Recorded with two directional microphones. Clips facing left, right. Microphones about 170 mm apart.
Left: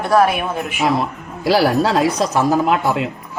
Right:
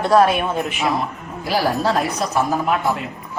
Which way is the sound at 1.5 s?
90° left.